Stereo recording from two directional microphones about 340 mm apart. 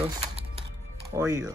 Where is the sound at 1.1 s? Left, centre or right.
Centre.